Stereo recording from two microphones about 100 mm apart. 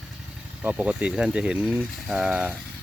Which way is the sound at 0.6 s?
10° right (ahead or behind).